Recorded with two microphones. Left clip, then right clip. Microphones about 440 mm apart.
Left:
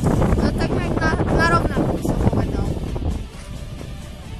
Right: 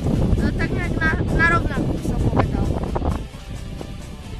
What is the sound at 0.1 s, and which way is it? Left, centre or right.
Boat, left.